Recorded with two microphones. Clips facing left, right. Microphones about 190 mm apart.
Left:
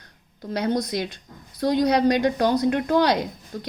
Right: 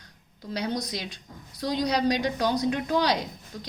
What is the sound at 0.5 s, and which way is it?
A woman's voice, 55° left (ahead or behind).